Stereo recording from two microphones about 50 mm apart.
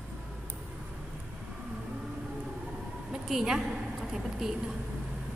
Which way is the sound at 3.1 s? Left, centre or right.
Centre.